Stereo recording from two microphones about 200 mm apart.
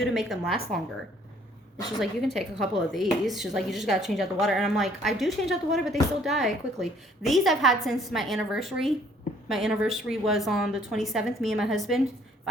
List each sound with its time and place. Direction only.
0.0 s speech: centre (ahead or behind)
2.0 s speech: centre (ahead or behind)